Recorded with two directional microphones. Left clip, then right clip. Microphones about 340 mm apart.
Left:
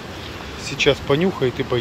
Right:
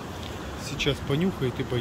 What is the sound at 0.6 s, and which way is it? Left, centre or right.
Speech, centre.